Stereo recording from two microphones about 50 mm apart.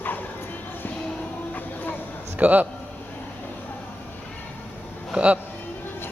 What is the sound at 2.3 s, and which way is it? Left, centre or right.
Speech, right.